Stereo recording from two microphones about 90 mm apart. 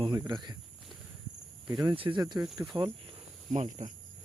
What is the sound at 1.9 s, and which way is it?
Speech, 65° right (ahead or behind).